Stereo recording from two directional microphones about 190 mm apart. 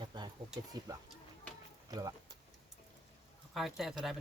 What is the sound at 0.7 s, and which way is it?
Speech, 20° right (ahead or behind).